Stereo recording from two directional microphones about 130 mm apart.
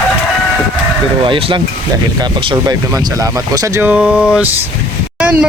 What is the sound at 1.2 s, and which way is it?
Speech, 40° right (ahead or behind).